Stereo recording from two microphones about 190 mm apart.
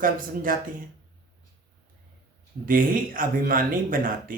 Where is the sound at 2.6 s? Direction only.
45° right (ahead or behind).